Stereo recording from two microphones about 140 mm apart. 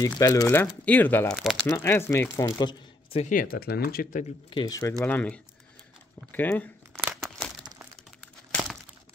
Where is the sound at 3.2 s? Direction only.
80° left.